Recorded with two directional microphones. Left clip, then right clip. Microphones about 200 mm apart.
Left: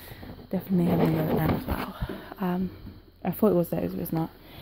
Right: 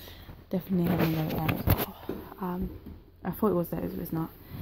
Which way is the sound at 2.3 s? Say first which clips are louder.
Left 6 dB; 45° left (ahead or behind).